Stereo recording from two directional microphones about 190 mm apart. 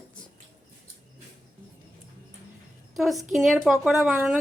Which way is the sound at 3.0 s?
Centre (ahead or behind).